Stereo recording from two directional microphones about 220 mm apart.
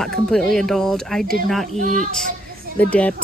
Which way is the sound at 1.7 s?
35° right (ahead or behind).